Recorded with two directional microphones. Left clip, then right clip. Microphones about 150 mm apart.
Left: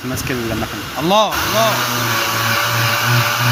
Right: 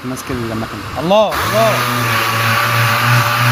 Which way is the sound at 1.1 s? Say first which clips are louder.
Right 2 dB; 30° right (ahead or behind).